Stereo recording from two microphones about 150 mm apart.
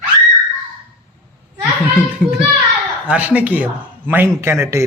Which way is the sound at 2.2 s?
5° right (ahead or behind).